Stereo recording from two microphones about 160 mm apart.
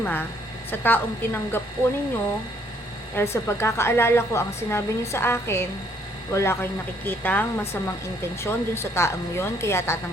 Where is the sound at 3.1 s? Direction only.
15° left (ahead or behind).